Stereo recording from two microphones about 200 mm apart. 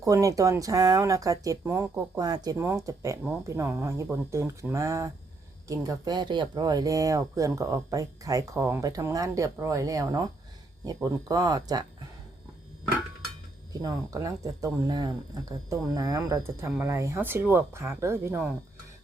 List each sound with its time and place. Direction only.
0.0 s speech: 15° right (ahead or behind)
13.8 s speech: 15° right (ahead or behind)